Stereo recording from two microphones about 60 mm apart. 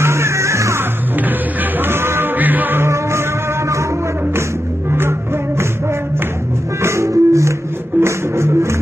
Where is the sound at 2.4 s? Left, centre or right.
Right.